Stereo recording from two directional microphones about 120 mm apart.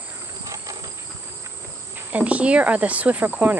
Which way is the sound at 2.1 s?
10° right (ahead or behind).